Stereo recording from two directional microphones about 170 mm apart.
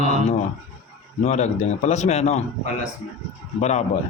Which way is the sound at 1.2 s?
40° left (ahead or behind).